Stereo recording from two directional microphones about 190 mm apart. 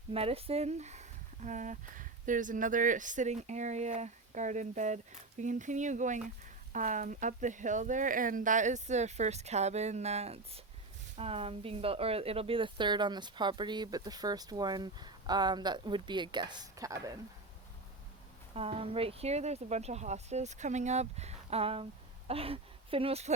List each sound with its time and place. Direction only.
0.1 s speech: 30° right (ahead or behind)
18.5 s speech: 30° right (ahead or behind)